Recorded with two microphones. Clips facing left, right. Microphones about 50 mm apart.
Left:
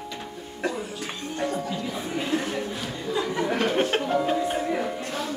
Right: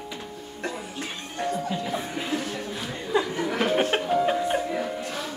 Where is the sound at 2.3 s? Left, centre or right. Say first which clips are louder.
Left 3 dB; left.